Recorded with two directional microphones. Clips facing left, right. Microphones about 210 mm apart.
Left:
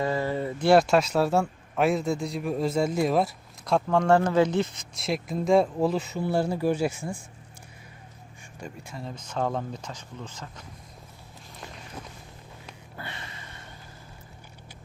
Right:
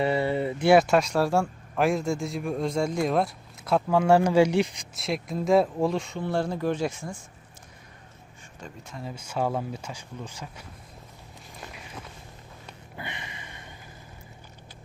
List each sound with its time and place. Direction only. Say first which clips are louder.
0.0 s a sound: right 2 dB; 15° right (ahead or behind)
0.7 s speech: even; centre (ahead or behind)
4.9 s speech: left 1 dB; centre (ahead or behind)
8.6 s speech: left 1 dB; 10° left (ahead or behind)
9.0 s speech: right 1 dB; 10° right (ahead or behind)
13.0 s a sound: right 2 dB; 15° right (ahead or behind)